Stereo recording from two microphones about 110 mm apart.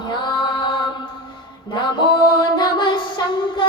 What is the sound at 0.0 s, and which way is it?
Music, 45° left (ahead or behind).